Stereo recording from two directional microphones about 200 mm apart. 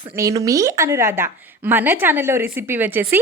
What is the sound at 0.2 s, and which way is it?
A woman's voice, 15° right (ahead or behind).